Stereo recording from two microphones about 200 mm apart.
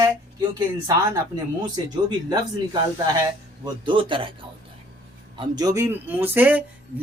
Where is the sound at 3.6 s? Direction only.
25° right (ahead or behind).